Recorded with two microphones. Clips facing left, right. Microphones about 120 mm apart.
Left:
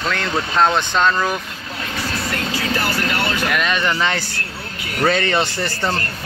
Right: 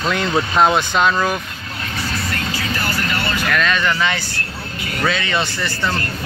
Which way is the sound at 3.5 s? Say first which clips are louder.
Right 4 dB; 15° left (ahead or behind).